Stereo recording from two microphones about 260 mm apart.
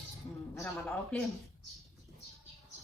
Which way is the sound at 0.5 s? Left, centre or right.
Centre.